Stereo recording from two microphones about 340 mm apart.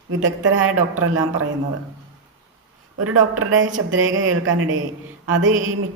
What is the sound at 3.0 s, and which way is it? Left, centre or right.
Speech, right.